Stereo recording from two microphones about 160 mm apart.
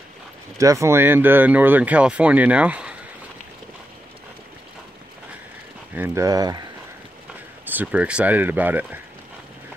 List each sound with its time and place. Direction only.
0.6 s speech: 20° right (ahead or behind)
5.9 s speech: 10° right (ahead or behind)
6.2 s speech: 25° right (ahead or behind)
7.6 s speech: 10° right (ahead or behind)